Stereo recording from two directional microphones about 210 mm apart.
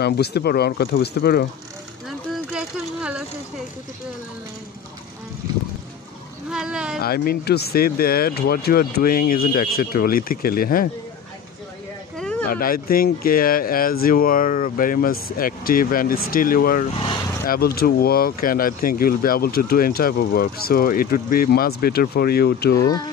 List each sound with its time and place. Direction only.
0.0 s speech: 50° left (ahead or behind)
2.0 s vehicle: 5° right (ahead or behind)
6.5 s speech: 5° right (ahead or behind)
7.0 s speech: 45° left (ahead or behind)
12.2 s a sound: 5° left (ahead or behind)
12.4 s speech: 45° left (ahead or behind)
22.8 s speech: 20° left (ahead or behind)